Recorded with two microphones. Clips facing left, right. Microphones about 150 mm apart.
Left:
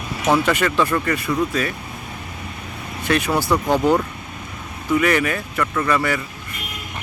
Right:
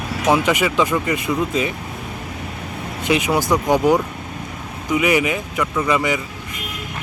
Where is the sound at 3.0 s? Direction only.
15° right (ahead or behind).